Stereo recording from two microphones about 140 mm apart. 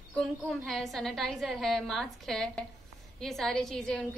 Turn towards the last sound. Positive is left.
turn(degrees=5)  # may be behind; listen again after turning